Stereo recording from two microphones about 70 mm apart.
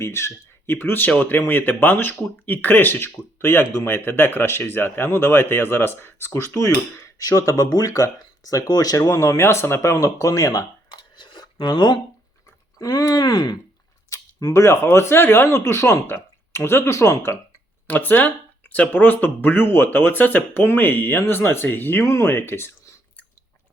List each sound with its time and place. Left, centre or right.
0.0 s speech: left
7.2 s speech: left
9.0 s speech: left
10.9 s scissors: left
12.8 s speech: left
14.1 s camera: left
14.5 s speech: left
17.8 s speech: left
22.0 s speech: left
22.3 s a sound: left